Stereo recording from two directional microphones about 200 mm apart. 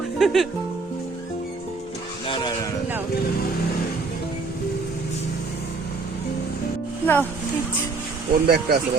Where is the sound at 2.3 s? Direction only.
25° left (ahead or behind).